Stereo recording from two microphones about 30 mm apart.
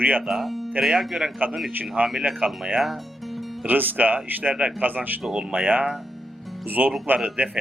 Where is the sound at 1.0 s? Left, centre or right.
Centre.